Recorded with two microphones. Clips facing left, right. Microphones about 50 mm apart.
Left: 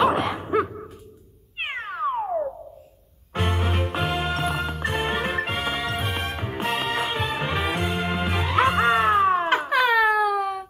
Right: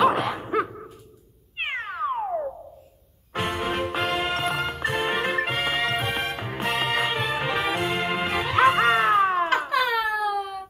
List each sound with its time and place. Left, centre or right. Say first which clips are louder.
0.0 s a sound: even; centre
1.6 s cat: left 1 dB; centre
3.3 s music: even; centre
9.7 s cat: left 3 dB; left
9.9 s cat: left 5 dB; left